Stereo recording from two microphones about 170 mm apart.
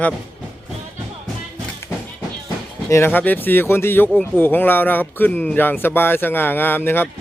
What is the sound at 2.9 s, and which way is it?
Speech, 10° left (ahead or behind).